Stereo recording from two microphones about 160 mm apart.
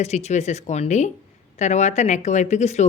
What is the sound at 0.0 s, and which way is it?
A woman's voice, 45° left (ahead or behind).